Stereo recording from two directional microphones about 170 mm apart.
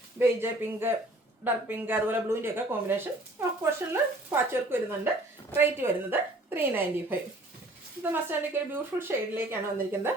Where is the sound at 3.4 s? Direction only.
10° right (ahead or behind).